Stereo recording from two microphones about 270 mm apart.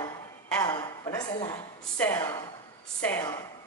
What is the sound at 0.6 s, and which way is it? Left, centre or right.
A woman's voice, centre.